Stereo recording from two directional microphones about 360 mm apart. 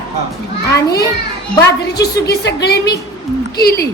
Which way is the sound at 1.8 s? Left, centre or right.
Left.